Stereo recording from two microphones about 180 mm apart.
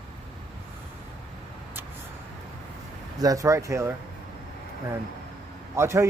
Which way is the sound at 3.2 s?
20° right (ahead or behind).